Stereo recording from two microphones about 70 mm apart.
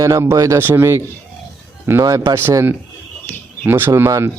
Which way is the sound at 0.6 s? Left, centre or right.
Right.